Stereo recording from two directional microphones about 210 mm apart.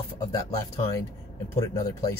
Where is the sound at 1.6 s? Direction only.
15° left (ahead or behind).